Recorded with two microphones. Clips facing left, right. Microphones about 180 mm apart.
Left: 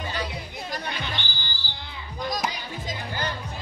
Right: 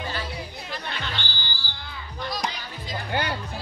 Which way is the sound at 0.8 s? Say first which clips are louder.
Left 1 dB; 15° left (ahead or behind).